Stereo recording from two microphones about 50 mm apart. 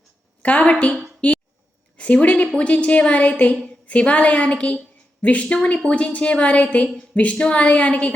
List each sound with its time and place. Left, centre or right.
0.4 s a woman's voice: left
1.2 s a sound: left
2.0 s a woman's voice: left